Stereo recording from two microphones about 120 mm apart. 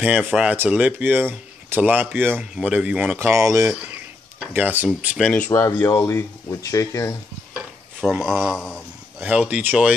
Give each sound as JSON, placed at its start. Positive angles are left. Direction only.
{"t": 0.0, "sound": "speech", "side_deg": -15}
{"t": 3.2, "sound": "speech", "side_deg": -25}
{"t": 3.6, "sound": "speech", "side_deg": -5}
{"t": 4.8, "sound": "speech", "side_deg": -5}
{"t": 5.3, "sound": "speech", "side_deg": 20}
{"t": 8.2, "sound": "speech", "side_deg": -5}